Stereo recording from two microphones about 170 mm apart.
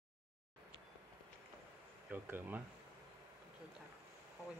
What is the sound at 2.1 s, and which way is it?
Speech, 10° right (ahead or behind).